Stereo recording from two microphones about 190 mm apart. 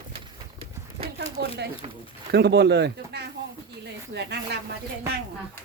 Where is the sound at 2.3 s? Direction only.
60° right (ahead or behind).